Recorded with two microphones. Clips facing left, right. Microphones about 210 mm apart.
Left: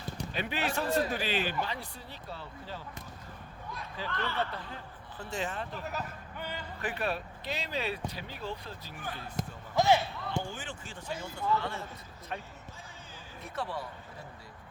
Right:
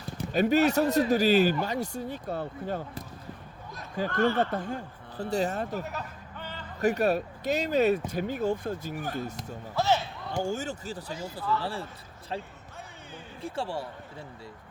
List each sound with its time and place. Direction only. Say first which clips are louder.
0.3 s speech: right 12 dB; 40° right (ahead or behind)
6.4 s music: left 1 dB; 10° left (ahead or behind)
6.8 s speech: right 10 dB; 45° right (ahead or behind)
9.7 s basketball bounce: left 1 dB; 15° left (ahead or behind)
10.3 s speech: right 9 dB; 45° right (ahead or behind)
13.4 s speech: right 4 dB; 30° right (ahead or behind)